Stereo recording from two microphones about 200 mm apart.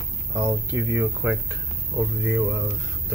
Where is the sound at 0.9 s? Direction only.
10° right (ahead or behind).